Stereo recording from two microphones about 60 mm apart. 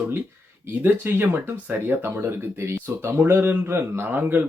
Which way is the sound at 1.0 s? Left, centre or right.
Right.